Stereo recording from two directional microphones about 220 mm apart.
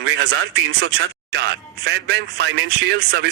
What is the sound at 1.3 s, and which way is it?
A man's voice, 50° right (ahead or behind).